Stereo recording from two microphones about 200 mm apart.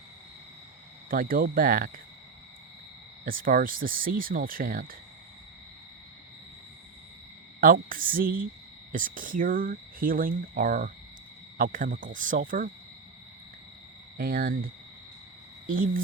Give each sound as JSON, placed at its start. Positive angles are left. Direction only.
{"t": 1.1, "sound": "speech", "side_deg": -45}
{"t": 3.2, "sound": "speech", "side_deg": -45}
{"t": 7.6, "sound": "speech", "side_deg": -45}
{"t": 14.2, "sound": "speech", "side_deg": -50}